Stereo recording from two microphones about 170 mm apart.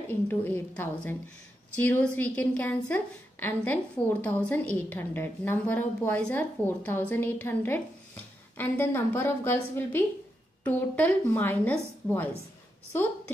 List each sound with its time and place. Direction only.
0.1 s a woman's voice: 10° left (ahead or behind)